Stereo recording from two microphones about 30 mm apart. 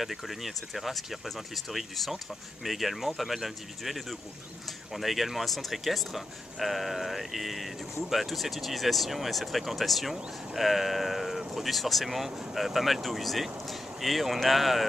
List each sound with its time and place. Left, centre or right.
0.0 s speech: centre